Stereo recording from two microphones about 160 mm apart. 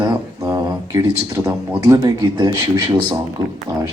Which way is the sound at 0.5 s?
20° right (ahead or behind).